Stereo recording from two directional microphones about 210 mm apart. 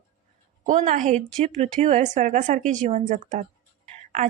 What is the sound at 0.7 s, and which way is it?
A woman's voice, 35° right (ahead or behind).